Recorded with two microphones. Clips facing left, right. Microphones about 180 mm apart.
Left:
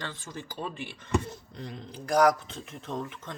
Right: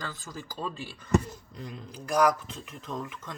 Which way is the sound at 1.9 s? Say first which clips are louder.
Left 2 dB; 30° left (ahead or behind).